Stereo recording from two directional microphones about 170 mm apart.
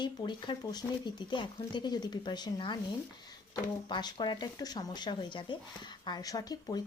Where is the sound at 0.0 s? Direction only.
25° left (ahead or behind).